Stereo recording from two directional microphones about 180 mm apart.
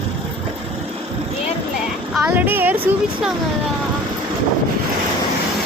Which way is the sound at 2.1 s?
10° right (ahead or behind).